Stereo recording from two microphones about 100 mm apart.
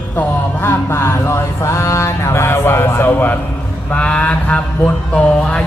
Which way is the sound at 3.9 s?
10° left (ahead or behind).